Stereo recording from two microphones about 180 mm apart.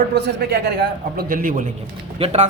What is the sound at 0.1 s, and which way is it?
A man's voice, 70° right (ahead or behind).